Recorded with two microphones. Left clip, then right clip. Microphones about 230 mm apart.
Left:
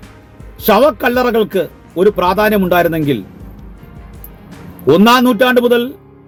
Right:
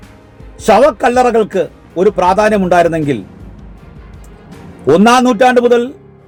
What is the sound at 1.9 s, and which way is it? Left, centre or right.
Speech, centre.